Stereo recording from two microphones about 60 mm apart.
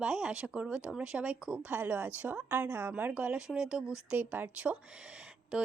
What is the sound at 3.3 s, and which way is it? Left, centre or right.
Speech, centre.